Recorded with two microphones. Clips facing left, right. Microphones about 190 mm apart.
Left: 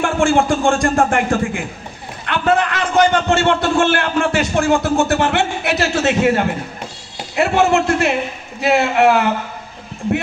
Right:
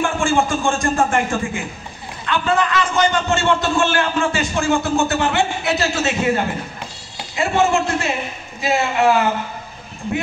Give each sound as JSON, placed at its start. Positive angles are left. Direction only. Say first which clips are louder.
{"t": 0.0, "sound": "a man's voice", "louder": "left 3 dB", "side_deg": 60}